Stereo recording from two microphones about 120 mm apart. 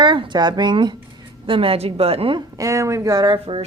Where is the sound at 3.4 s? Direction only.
55° right (ahead or behind).